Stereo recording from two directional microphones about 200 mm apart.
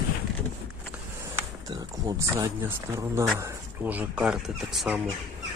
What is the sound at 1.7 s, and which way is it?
Speech, 15° right (ahead or behind).